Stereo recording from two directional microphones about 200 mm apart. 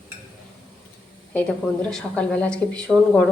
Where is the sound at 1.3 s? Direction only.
5° left (ahead or behind).